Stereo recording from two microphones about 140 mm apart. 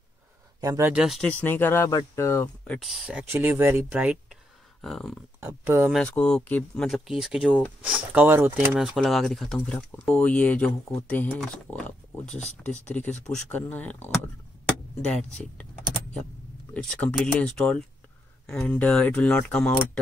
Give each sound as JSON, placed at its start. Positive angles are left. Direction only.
{"t": 0.6, "sound": "speech", "side_deg": -20}
{"t": 0.9, "sound": "speech", "side_deg": -5}
{"t": 1.2, "sound": "speech", "side_deg": 15}
{"t": 2.8, "sound": "speech", "side_deg": 0}
{"t": 4.8, "sound": "speech", "side_deg": 5}
{"t": 5.6, "sound": "speech", "side_deg": -15}
{"t": 5.9, "sound": "speech", "side_deg": 10}
{"t": 8.7, "sound": "speech", "side_deg": 0}
{"t": 16.7, "sound": "speech", "side_deg": 10}